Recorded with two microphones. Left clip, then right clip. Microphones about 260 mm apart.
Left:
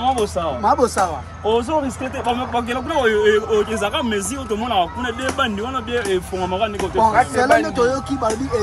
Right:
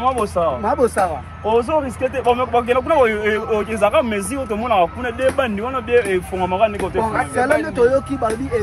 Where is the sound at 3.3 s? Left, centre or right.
Right.